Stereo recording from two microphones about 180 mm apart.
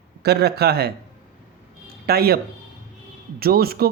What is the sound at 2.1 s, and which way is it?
Speech, 60° right (ahead or behind).